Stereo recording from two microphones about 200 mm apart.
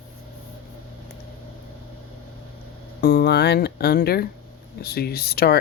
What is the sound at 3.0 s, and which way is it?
Speech, 50° left (ahead or behind).